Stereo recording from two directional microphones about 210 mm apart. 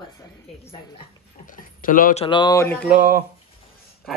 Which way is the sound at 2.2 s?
20° left (ahead or behind).